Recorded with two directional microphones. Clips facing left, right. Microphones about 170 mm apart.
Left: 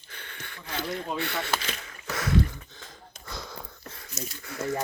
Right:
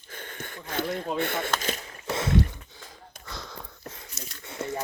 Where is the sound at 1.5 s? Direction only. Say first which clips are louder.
Right 3 dB; 40° right (ahead or behind).